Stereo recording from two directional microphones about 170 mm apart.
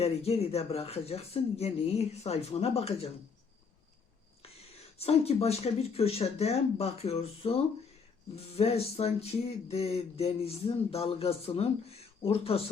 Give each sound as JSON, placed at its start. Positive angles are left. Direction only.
{"t": 0.0, "sound": "speech", "side_deg": 35}
{"t": 4.9, "sound": "speech", "side_deg": 35}